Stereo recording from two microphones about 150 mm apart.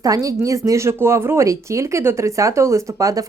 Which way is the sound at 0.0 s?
25° right (ahead or behind).